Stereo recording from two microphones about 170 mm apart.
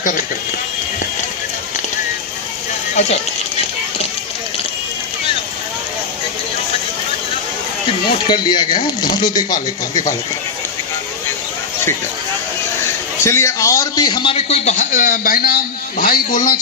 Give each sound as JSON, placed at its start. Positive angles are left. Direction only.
{"t": 8.3, "sound": "speech", "side_deg": 25}
{"t": 13.2, "sound": "speech", "side_deg": 15}